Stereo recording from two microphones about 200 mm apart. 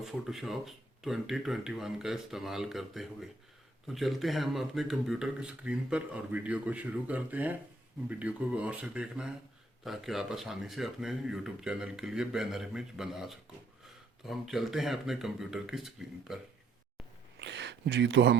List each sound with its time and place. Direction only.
0.0 s speech: centre (ahead or behind)
17.4 s speech: 60° right (ahead or behind)